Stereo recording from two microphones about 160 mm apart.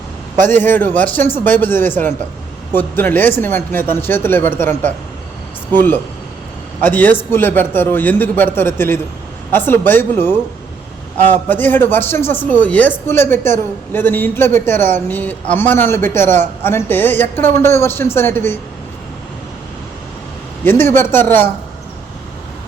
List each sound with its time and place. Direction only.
0.5 s a man's voice: 10° left (ahead or behind)
6.8 s a man's voice: 10° left (ahead or behind)
20.7 s a man's voice: 15° left (ahead or behind)